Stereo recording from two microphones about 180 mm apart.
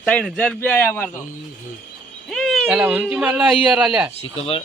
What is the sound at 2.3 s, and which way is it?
Speech, centre (ahead or behind).